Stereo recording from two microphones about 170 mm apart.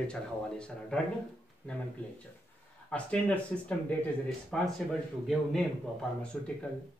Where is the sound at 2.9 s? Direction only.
10° left (ahead or behind).